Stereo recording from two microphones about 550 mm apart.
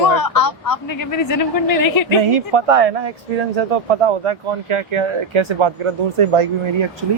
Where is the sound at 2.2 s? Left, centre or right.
Right.